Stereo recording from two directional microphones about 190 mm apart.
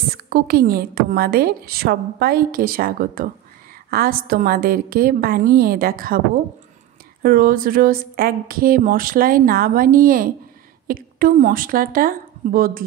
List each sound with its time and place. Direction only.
0.1 s a woman's voice: 55° right (ahead or behind)
7.2 s a woman's voice: 50° right (ahead or behind)